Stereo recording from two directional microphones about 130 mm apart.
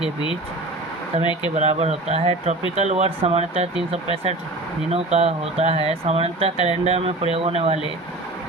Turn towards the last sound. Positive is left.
turn(degrees=-50)  # may be behind; listen again after turning